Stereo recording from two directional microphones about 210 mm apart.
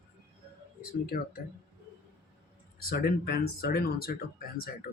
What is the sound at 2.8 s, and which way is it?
Speech, 45° left (ahead or behind).